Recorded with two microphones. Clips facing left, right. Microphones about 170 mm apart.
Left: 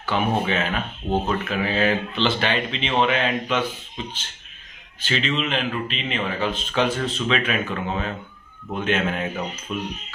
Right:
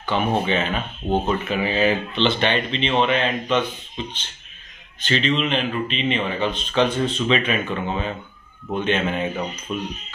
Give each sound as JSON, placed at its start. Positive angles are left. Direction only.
{"t": 0.0, "sound": "a man's voice", "side_deg": 5}
{"t": 1.0, "sound": "speech", "side_deg": -30}
{"t": 1.5, "sound": "a man's voice", "side_deg": 0}